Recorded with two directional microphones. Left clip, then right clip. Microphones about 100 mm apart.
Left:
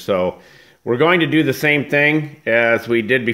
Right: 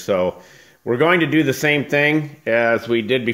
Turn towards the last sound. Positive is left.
turn(degrees=10)  # may be behind; listen again after turning